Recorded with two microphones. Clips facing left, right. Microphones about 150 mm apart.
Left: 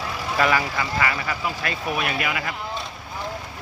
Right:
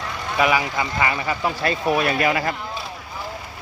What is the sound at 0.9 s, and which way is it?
Speech, 25° right (ahead or behind).